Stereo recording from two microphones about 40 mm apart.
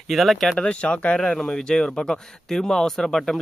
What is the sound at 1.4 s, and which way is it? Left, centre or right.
Speech, centre.